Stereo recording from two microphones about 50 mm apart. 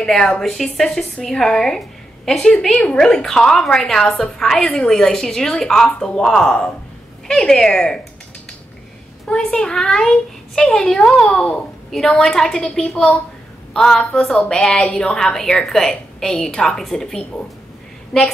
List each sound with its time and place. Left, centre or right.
0.0 s a woman's voice: centre
1.8 s a sound: centre
2.8 s a woman's voice: centre
9.3 s a woman's voice: left